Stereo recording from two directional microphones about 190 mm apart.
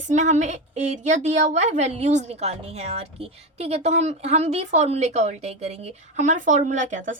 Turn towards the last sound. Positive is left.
turn(degrees=-40)  # may be behind; listen again after turning